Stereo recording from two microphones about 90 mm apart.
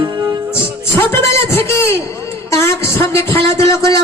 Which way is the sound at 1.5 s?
30° left (ahead or behind).